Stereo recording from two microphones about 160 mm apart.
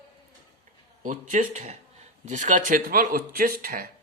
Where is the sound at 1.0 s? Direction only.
55° right (ahead or behind).